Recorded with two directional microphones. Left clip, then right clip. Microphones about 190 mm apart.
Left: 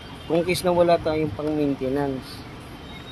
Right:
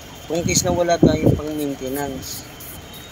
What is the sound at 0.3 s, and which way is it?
Speech, 35° left (ahead or behind).